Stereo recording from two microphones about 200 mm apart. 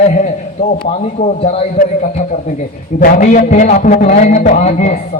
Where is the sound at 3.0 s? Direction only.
40° left (ahead or behind).